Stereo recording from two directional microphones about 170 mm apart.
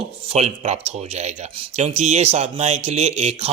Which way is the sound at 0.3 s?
40° right (ahead or behind).